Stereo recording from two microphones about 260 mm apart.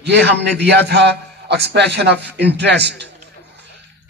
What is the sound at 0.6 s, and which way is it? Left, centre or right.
A man's voice, right.